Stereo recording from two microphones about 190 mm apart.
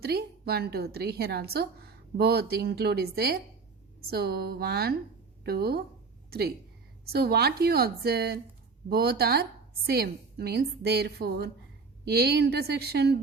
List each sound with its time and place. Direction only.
0.0 s a woman's voice: 55° right (ahead or behind)
7.0 s a woman's voice: 55° right (ahead or behind)